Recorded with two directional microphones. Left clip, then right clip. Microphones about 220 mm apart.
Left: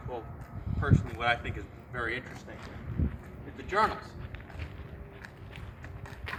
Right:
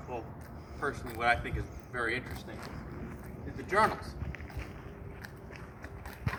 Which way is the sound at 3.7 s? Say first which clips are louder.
Even; 15° right (ahead or behind).